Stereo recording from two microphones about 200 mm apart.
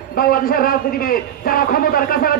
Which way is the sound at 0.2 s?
45° left (ahead or behind).